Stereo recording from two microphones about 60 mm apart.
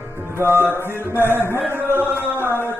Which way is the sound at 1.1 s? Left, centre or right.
Left.